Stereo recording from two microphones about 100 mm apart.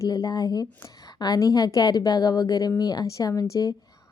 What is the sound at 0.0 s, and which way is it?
A woman's voice, 40° left (ahead or behind).